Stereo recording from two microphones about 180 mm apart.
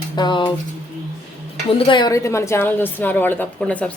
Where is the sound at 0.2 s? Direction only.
25° left (ahead or behind).